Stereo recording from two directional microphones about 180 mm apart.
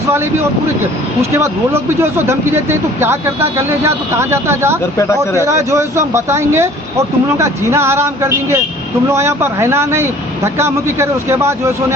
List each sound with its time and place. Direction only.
1.2 s speech: 15° right (ahead or behind)
4.8 s speech: 15° left (ahead or behind)
5.4 s speech: 15° right (ahead or behind)